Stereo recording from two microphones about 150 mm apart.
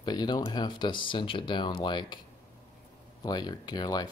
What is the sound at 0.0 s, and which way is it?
Speech, 30° left (ahead or behind).